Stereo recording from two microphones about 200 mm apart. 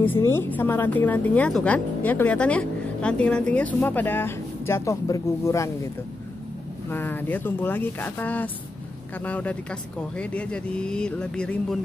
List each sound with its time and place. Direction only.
0.0 s a woman's voice: 10° left (ahead or behind)
6.9 s a woman's voice: 10° left (ahead or behind)